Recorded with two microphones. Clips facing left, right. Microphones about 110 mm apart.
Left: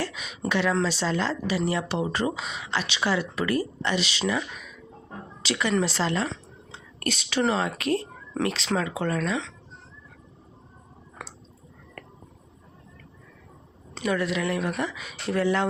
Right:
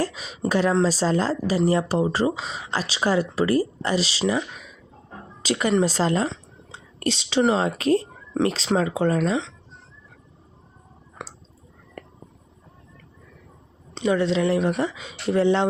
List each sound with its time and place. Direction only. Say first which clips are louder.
0.0 s a woman's voice: right 5 dB; 35° right (ahead or behind)
5.4 s a woman's voice: right 4 dB; 40° right (ahead or behind)
6.2 s speech: right 4 dB; 25° right (ahead or behind)
11.2 s clicking: right 3 dB; 20° right (ahead or behind)
12.0 s a sound: right 4 dB; 20° right (ahead or behind)
13.9 s speech: right 5 dB; 25° right (ahead or behind)